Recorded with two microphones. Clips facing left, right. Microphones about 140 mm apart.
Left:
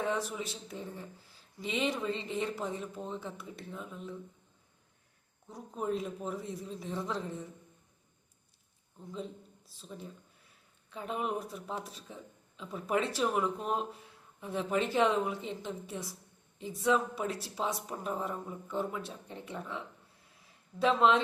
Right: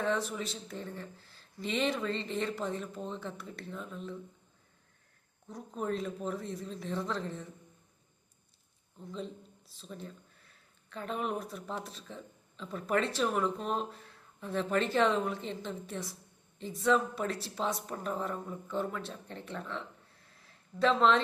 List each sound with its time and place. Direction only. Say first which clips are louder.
0.0 s speech: right 1 dB; 10° left (ahead or behind)
5.5 s speech: even; 10° left (ahead or behind)
9.0 s speech: right 1 dB; 10° left (ahead or behind)